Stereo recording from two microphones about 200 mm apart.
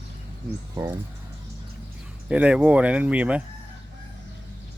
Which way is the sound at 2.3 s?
5° right (ahead or behind).